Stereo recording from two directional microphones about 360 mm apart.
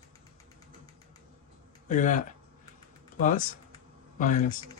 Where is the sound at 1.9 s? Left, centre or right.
Left.